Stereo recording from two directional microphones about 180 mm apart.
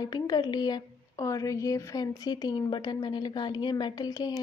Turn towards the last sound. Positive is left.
turn(degrees=20)  # may be behind; listen again after turning